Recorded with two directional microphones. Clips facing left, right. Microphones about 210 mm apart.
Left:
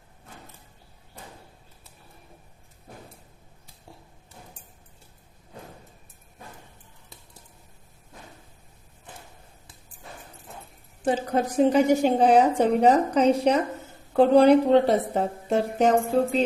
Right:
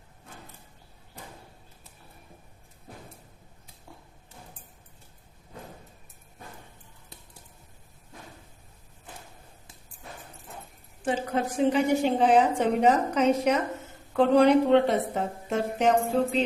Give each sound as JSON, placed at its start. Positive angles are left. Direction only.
{"t": 11.0, "sound": "speech", "side_deg": 40}